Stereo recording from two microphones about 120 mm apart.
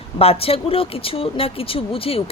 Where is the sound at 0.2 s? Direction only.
55° left (ahead or behind).